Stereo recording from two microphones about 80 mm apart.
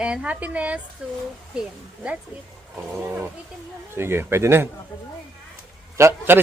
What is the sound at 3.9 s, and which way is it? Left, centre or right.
Speech, right.